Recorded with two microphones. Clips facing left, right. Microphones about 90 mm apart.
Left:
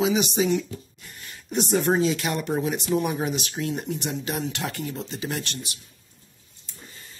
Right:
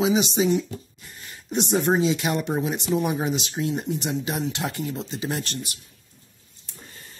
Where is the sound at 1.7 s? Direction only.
5° right (ahead or behind).